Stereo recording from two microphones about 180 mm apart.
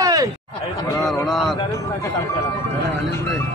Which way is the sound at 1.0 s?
Centre (ahead or behind).